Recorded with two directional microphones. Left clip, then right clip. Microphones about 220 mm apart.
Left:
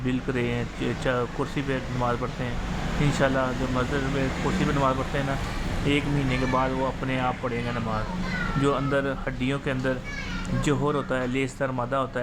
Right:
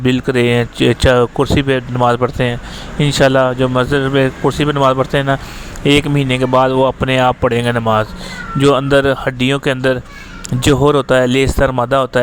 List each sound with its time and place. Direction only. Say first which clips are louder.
0.0 s speech: right 14 dB; 45° right (ahead or behind)